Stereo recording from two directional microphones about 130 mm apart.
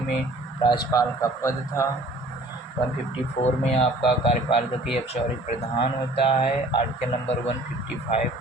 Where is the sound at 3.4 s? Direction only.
45° left (ahead or behind).